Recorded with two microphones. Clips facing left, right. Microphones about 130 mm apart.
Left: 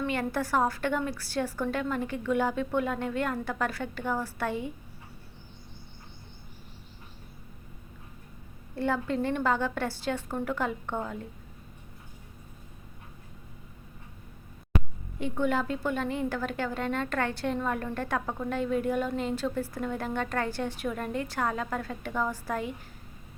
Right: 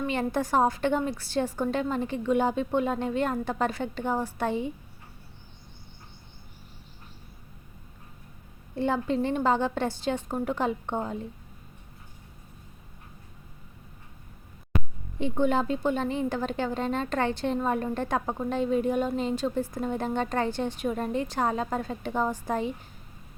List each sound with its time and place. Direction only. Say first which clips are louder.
0.1 s a woman's voice: right 2 dB; 20° right (ahead or behind)
8.7 s a woman's voice: right 2 dB; 20° right (ahead or behind)
15.2 s a woman's voice: right 3 dB; 20° right (ahead or behind)